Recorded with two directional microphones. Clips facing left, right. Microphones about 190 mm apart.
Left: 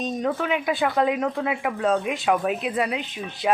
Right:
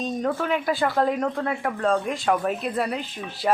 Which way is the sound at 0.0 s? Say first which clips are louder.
Even; centre (ahead or behind).